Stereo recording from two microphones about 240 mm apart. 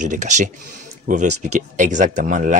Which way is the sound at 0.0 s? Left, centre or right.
Right.